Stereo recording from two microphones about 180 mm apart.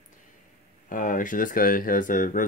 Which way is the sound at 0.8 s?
45° left (ahead or behind).